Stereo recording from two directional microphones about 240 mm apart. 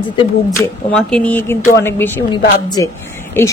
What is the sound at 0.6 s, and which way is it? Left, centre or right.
Speech, centre.